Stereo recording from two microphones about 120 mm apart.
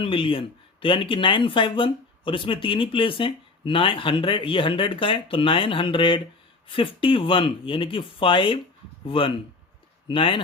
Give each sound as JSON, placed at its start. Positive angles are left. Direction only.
{"t": 0.0, "sound": "speech", "side_deg": 45}